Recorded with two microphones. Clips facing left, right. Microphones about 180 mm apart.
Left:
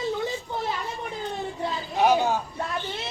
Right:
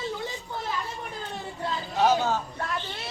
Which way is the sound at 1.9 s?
15° left (ahead or behind).